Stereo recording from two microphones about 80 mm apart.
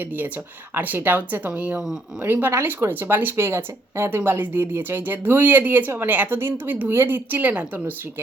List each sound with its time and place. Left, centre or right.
0.7 s speech: right